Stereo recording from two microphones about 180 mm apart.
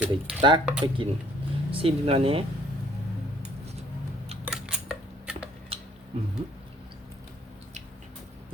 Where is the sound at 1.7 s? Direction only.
30° right (ahead or behind).